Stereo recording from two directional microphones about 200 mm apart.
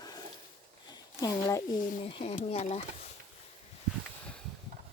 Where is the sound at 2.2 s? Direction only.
30° left (ahead or behind).